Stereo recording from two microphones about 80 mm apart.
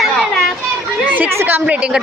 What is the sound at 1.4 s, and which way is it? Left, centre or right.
Speech, right.